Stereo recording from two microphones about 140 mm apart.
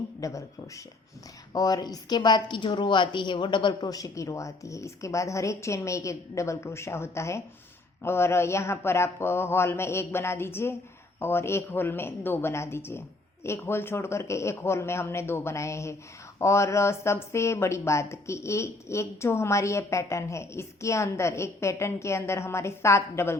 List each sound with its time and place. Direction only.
0.2 s speech: 20° left (ahead or behind)
1.5 s speech: 30° left (ahead or behind)